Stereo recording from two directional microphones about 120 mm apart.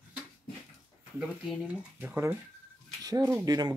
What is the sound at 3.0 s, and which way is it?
Speech, 30° right (ahead or behind).